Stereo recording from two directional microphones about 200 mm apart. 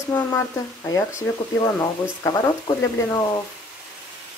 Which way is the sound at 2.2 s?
15° left (ahead or behind).